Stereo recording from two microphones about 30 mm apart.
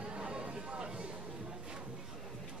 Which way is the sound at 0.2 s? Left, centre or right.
Right.